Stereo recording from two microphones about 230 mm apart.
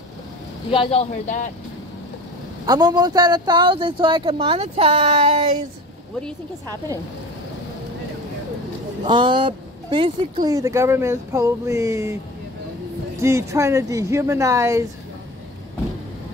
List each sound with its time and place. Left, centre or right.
0.7 s a man's voice: left
2.6 s a man's voice: centre
9.0 s speech: right
13.2 s speech: centre